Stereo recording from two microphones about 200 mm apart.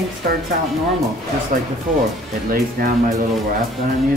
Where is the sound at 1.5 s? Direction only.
45° right (ahead or behind).